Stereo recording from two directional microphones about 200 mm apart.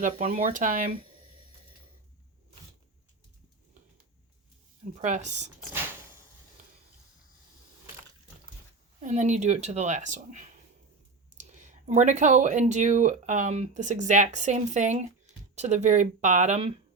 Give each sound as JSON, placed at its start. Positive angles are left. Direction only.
{"t": 0.0, "sound": "speech", "side_deg": -40}
{"t": 4.9, "sound": "speech", "side_deg": -35}
{"t": 9.0, "sound": "speech", "side_deg": -35}